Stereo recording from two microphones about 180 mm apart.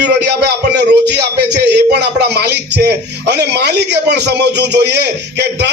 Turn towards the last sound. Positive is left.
turn(degrees=-70)  # may be behind; listen again after turning